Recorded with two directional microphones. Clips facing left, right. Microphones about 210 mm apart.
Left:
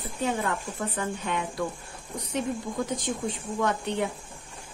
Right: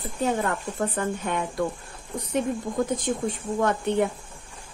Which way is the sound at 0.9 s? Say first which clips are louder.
Right 3 dB; 50° right (ahead or behind).